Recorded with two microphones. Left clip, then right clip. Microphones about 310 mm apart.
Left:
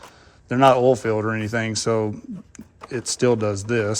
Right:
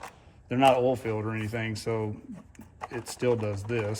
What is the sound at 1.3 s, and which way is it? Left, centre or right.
Speech, left.